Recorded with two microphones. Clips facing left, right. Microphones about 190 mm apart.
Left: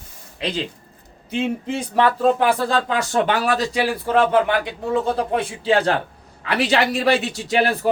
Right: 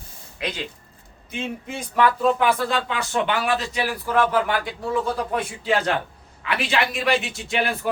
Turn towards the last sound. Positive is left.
turn(degrees=35)  # may be behind; listen again after turning